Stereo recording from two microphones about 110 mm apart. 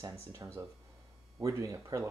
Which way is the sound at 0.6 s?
30° right (ahead or behind).